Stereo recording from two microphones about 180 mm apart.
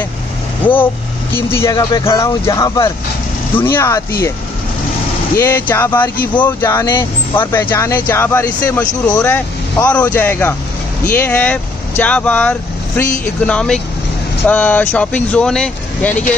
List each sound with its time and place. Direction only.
1.3 s speech: 15° left (ahead or behind)
5.4 s speech: 10° left (ahead or behind)